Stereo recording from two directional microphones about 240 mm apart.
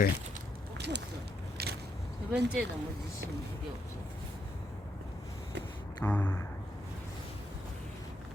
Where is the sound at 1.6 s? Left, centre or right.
Right.